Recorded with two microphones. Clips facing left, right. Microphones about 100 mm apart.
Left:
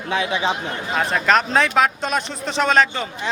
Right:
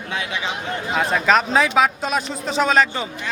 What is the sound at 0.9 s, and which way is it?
Speech, centre (ahead or behind).